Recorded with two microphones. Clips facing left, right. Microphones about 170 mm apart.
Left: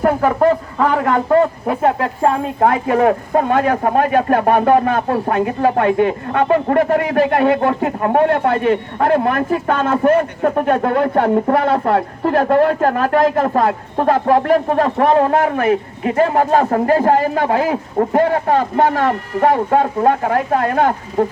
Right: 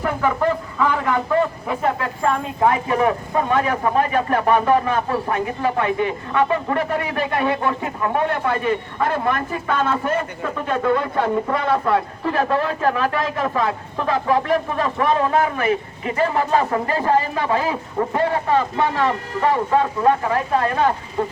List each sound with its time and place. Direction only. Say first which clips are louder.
0.0 s speech: left 6 dB; 45° left (ahead or behind)
2.6 s speech: left 4 dB; 55° left (ahead or behind)